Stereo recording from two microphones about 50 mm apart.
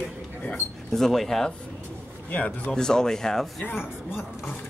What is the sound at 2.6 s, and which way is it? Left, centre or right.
Speech, centre.